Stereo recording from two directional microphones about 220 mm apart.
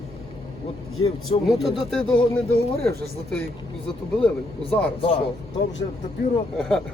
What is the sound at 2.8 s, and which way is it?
Speech, 45° right (ahead or behind).